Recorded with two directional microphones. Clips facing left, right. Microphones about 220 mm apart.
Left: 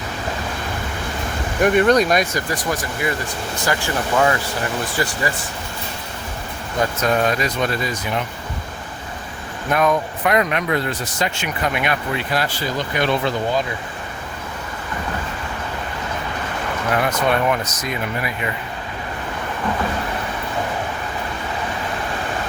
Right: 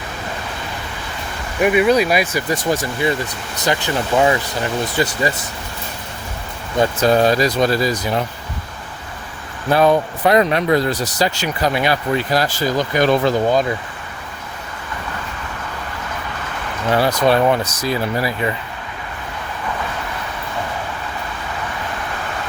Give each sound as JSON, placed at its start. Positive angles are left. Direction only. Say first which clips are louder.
{"t": 1.6, "sound": "speech", "louder": "right 1 dB", "side_deg": -5}
{"t": 2.5, "sound": "speech", "louder": "right 4 dB", "side_deg": -25}
{"t": 6.7, "sound": "speech", "louder": "right 5 dB", "side_deg": -30}
{"t": 9.6, "sound": "speech", "louder": "right 4 dB", "side_deg": -30}
{"t": 16.9, "sound": "speech", "louder": "right 5 dB", "side_deg": -35}